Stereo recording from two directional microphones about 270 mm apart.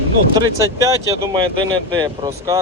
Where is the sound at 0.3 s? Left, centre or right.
Centre.